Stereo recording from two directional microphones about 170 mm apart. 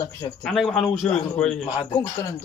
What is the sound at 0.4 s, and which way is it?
A man's voice, centre (ahead or behind).